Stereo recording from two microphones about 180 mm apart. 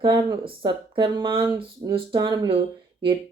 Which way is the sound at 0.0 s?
25° right (ahead or behind).